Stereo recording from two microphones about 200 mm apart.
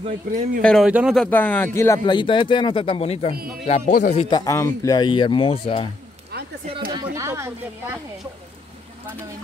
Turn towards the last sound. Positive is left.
turn(degrees=-15)  # may be behind; listen again after turning